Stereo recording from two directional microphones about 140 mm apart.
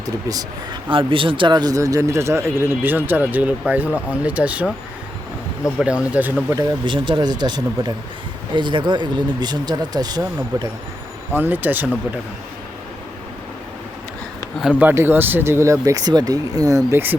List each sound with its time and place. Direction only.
0.0 s speech: 25° right (ahead or behind); by 4.7 s 10° right (ahead or behind)
5.8 s speech: 10° right (ahead or behind)
6.6 s speech: 35° right (ahead or behind)
11.3 s speech: 15° right (ahead or behind)
14.6 s speech: 10° right (ahead or behind)